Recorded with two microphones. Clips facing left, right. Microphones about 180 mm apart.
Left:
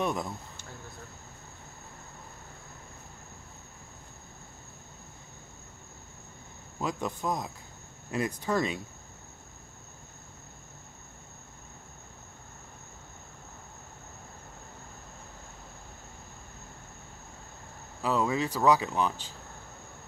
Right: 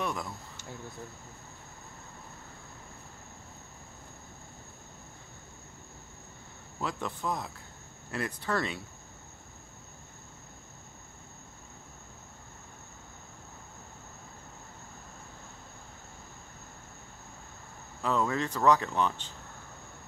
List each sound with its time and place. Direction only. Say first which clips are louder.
0.0 s speech: left 4 dB; 20° left (ahead or behind)
6.8 s speech: left 2 dB; 15° left (ahead or behind)
18.0 s speech: left 1 dB; 10° left (ahead or behind)